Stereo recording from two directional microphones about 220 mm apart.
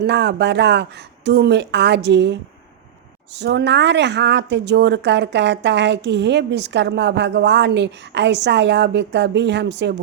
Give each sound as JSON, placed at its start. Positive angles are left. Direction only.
{"t": 0.0, "sound": "speech", "side_deg": -50}